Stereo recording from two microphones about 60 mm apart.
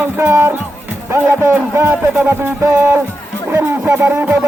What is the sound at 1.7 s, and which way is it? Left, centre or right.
Speech, right.